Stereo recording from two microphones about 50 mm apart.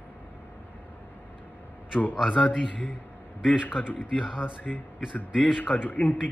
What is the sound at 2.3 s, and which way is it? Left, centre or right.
Speech, left.